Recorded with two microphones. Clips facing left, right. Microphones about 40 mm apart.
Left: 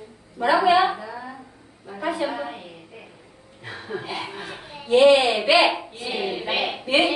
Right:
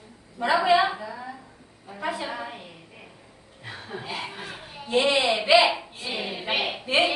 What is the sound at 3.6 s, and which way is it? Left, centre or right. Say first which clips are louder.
A child's voice: left 4 dB; centre.